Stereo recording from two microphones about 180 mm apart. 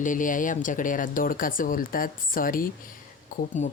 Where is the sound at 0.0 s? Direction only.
45° left (ahead or behind).